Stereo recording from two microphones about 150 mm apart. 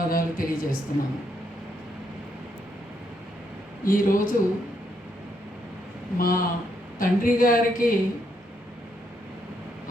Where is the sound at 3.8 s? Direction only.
70° left (ahead or behind).